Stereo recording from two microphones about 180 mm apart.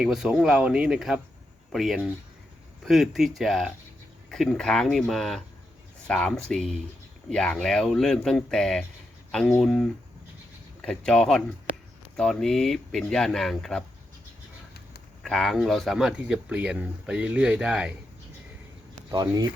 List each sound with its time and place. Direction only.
0.0 s speech: 5° right (ahead or behind)
15.2 s speech: centre (ahead or behind)
19.1 s speech: 20° right (ahead or behind)